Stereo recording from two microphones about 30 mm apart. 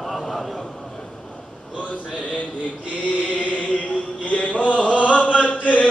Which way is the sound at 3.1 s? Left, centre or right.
Left.